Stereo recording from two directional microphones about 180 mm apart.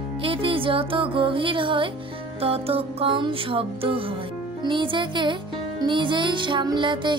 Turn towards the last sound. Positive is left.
turn(degrees=-25)  # may be behind; listen again after turning